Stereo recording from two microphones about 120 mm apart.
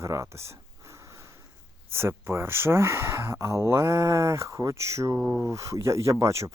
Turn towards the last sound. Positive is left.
turn(degrees=-25)  # may be behind; listen again after turning